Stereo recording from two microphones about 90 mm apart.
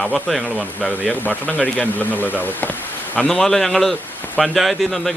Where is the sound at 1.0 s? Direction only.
20° left (ahead or behind).